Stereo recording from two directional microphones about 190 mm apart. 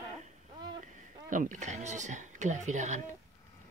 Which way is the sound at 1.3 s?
45° right (ahead or behind).